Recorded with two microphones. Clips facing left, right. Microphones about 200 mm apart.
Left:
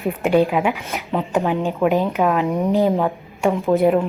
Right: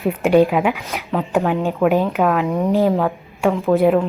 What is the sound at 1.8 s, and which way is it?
Speech, centre (ahead or behind).